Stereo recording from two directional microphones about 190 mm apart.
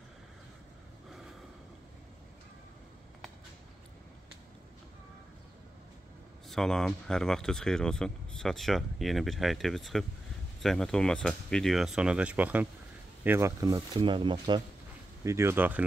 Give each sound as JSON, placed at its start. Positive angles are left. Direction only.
{"t": 6.5, "sound": "speech", "side_deg": 5}
{"t": 15.2, "sound": "speech", "side_deg": -15}